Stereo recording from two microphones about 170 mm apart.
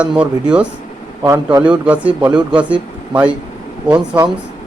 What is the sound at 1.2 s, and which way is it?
Speech, 20° right (ahead or behind).